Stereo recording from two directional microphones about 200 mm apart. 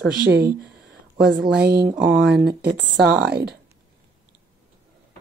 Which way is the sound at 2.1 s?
60° right (ahead or behind).